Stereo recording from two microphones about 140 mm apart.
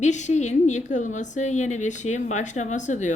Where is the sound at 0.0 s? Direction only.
55° left (ahead or behind).